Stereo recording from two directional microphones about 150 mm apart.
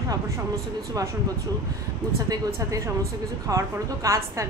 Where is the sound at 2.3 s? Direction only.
20° right (ahead or behind).